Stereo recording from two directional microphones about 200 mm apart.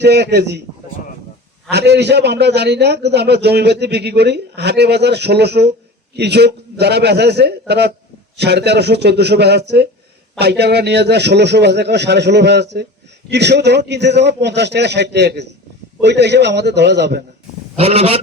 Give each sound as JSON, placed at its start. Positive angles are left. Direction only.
{"t": 0.0, "sound": "a man's voice", "side_deg": -55}
{"t": 1.7, "sound": "a man's voice", "side_deg": -55}
{"t": 17.7, "sound": "a sound", "side_deg": -30}